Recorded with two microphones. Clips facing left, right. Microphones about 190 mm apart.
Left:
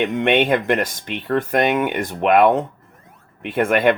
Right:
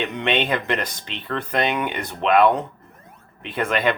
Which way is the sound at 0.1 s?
50° left (ahead or behind).